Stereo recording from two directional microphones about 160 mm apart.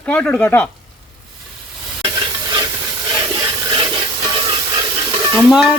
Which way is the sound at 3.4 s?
25° right (ahead or behind).